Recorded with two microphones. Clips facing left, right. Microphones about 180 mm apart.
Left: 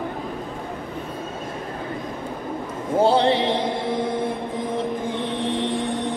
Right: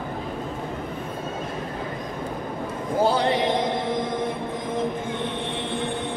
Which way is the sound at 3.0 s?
30° left (ahead or behind).